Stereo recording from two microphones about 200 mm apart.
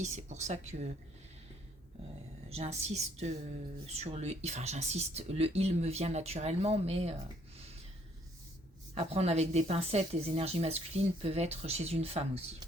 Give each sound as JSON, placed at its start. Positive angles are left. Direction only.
{"t": 0.0, "sound": "speech", "side_deg": -35}
{"t": 2.5, "sound": "speech", "side_deg": -30}
{"t": 9.0, "sound": "speech", "side_deg": -30}